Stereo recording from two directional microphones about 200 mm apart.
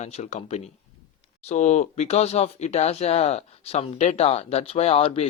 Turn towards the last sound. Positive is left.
turn(degrees=30)  # may be behind; listen again after turning